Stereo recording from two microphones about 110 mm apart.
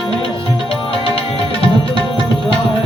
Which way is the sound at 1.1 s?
55° left (ahead or behind).